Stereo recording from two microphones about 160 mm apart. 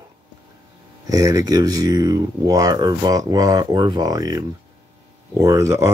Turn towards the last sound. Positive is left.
turn(degrees=-20)  # may be behind; listen again after turning